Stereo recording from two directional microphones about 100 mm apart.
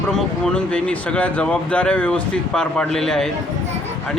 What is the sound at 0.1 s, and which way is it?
Speech, 10° left (ahead or behind).